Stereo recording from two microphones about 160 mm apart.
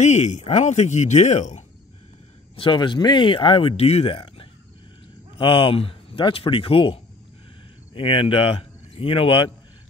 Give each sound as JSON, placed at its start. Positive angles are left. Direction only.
{"t": 0.0, "sound": "speech", "side_deg": 45}
{"t": 2.5, "sound": "speech", "side_deg": 30}